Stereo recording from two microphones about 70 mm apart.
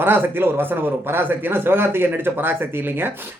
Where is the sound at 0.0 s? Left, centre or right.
Right.